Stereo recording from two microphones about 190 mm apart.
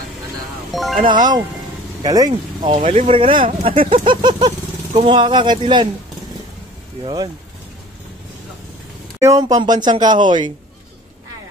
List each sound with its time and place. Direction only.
0.7 s music: centre (ahead or behind)
1.0 s speech: 25° right (ahead or behind)
2.8 s speech: 35° right (ahead or behind)
9.2 s speech: 20° right (ahead or behind)